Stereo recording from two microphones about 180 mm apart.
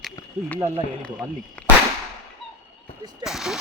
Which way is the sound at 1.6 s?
10° left (ahead or behind).